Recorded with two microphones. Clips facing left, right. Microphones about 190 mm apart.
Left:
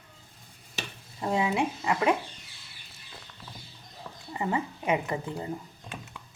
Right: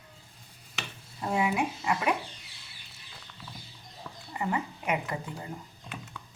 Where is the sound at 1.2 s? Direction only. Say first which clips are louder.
Left 1 dB; 25° left (ahead or behind).